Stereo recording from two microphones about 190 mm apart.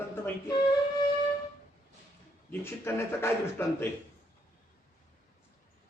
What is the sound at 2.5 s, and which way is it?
Speech, 10° left (ahead or behind).